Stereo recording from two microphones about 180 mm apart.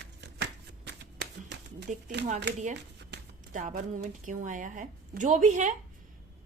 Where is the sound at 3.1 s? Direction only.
75° right (ahead or behind).